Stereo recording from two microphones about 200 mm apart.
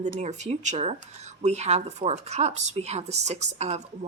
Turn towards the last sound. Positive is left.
turn(degrees=-35)  # may be behind; listen again after turning